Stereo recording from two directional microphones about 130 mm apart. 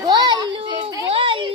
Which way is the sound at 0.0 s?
30° right (ahead or behind).